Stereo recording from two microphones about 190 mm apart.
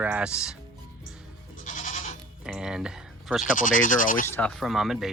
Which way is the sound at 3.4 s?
45° left (ahead or behind).